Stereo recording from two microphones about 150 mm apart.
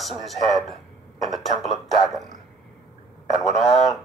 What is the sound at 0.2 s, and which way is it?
Speech, centre (ahead or behind).